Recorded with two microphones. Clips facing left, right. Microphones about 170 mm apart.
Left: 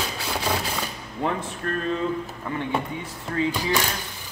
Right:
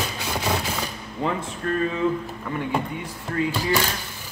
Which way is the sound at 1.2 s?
10° right (ahead or behind).